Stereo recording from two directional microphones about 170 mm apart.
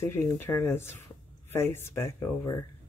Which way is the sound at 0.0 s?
15° left (ahead or behind).